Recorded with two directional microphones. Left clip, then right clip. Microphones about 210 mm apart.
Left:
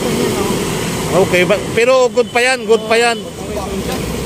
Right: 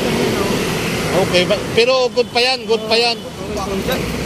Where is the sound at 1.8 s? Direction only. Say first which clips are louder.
Left 7 dB; 65° left (ahead or behind).